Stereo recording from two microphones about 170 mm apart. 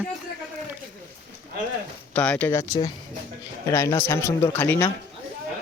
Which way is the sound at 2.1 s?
5° left (ahead or behind).